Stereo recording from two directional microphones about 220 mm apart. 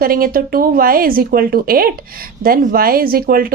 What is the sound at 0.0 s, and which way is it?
A woman's voice, 40° right (ahead or behind).